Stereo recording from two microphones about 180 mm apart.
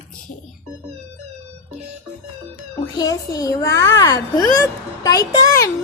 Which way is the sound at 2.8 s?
20° left (ahead or behind).